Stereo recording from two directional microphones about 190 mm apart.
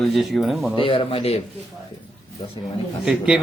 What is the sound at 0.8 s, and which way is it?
Speech, 30° left (ahead or behind).